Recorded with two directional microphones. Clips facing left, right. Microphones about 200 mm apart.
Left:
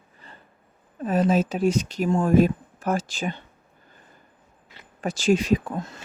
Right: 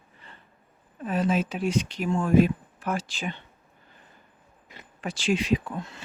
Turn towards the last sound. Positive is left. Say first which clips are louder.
# left 3 dB
turn(degrees=45)  # may be behind; listen again after turning